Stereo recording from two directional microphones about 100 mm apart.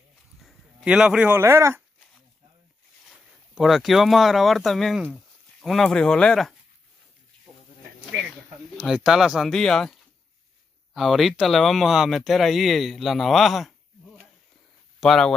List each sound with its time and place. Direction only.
0.4 s a sound: centre (ahead or behind)
1.3 s speech: 25° right (ahead or behind)
3.1 s speech: centre (ahead or behind)
5.1 s a sound: centre (ahead or behind)
5.9 s speech: 10° left (ahead or behind)
8.7 s speech: centre (ahead or behind)
15.0 s speech: 5° left (ahead or behind)